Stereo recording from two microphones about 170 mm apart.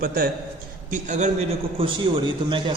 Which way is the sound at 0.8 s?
50° right (ahead or behind).